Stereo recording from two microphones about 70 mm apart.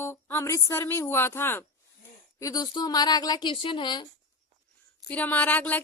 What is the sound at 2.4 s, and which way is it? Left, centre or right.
Speech, left.